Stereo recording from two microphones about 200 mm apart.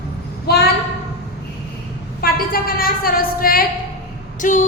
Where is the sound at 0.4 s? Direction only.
50° left (ahead or behind).